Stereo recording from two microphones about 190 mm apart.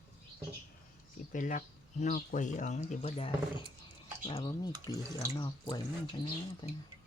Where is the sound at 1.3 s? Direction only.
45° left (ahead or behind); by 6.7 s 25° left (ahead or behind).